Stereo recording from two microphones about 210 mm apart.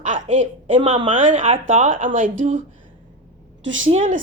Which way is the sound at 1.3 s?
35° right (ahead or behind).